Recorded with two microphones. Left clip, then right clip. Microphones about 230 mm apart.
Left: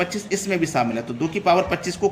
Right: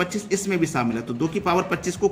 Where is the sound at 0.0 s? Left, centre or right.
Centre.